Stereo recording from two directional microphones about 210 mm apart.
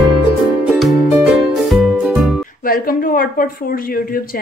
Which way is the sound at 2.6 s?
45° left (ahead or behind).